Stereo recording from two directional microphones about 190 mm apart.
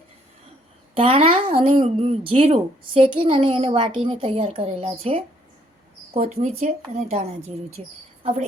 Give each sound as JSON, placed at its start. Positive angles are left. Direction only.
{"t": 0.9, "sound": "a woman's voice", "side_deg": -30}